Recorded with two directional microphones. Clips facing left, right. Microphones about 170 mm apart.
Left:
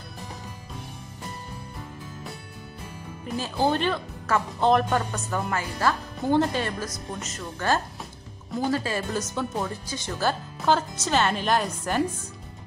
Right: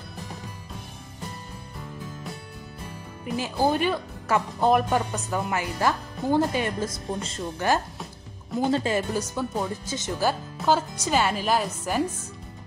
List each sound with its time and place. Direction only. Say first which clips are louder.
3.3 s speech: right 1 dB; 10° right (ahead or behind)
6.1 s speech: left 2 dB; centre (ahead or behind)
6.5 s speech: right 2 dB; 15° right (ahead or behind)
7.1 s speech: right 4 dB; 30° right (ahead or behind)
7.5 s speech: right 1 dB; 15° right (ahead or behind)
9.1 s speech: right 1 dB; 10° right (ahead or behind)
9.8 s speech: right 2 dB; 20° right (ahead or behind)
10.6 s speech: even; 5° right (ahead or behind)